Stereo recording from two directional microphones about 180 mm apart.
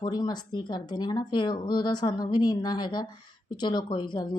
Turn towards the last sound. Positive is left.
turn(degrees=25)  # may be behind; listen again after turning